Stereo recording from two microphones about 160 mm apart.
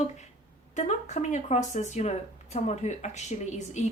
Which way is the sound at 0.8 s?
50° left (ahead or behind).